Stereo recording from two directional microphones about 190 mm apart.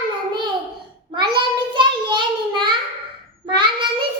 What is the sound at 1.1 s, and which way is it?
Child singing, 25° right (ahead or behind).